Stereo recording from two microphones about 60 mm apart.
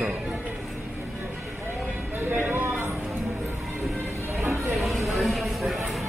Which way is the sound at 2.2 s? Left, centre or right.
Right.